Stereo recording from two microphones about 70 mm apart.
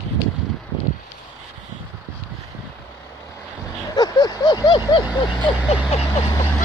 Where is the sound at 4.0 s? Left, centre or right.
Left.